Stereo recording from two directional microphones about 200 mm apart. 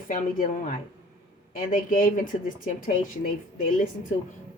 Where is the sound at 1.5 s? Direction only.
45° left (ahead or behind).